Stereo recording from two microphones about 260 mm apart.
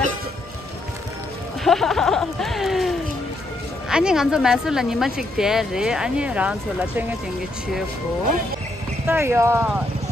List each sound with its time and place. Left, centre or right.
1.6 s a sound: centre
3.9 s speech: centre
9.0 s speech: centre